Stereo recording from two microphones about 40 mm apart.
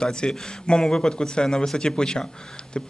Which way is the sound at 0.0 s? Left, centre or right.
Left.